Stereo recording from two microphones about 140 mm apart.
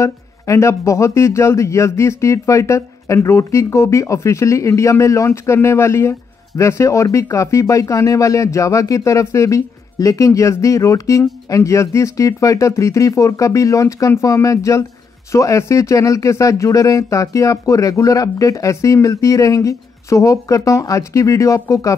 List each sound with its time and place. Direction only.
0.0 s speech: 20° left (ahead or behind)